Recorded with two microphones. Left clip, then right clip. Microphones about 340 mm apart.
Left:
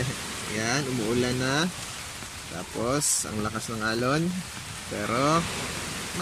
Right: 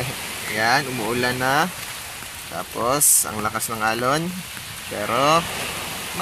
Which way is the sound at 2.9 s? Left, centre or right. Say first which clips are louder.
Right 7 dB; right.